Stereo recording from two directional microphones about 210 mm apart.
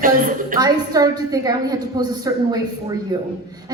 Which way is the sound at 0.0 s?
40° right (ahead or behind).